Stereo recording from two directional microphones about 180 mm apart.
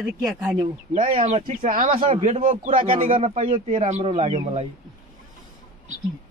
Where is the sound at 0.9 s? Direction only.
50° right (ahead or behind).